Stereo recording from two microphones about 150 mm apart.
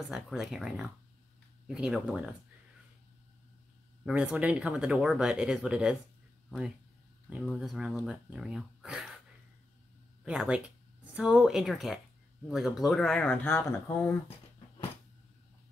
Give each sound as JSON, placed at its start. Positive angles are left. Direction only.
{"t": 0.1, "sound": "speech", "side_deg": -5}
{"t": 4.0, "sound": "speech", "side_deg": -10}
{"t": 7.5, "sound": "speech", "side_deg": -5}
{"t": 10.2, "sound": "speech", "side_deg": -5}